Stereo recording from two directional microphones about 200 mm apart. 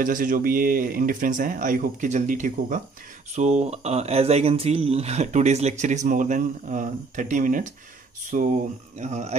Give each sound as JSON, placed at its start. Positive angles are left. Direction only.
{"t": 0.0, "sound": "speech", "side_deg": -45}